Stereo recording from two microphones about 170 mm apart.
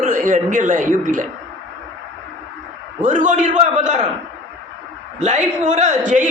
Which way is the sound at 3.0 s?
50° right (ahead or behind).